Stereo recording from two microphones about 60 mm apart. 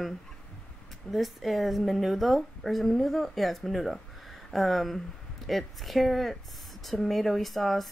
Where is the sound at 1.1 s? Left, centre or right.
Centre.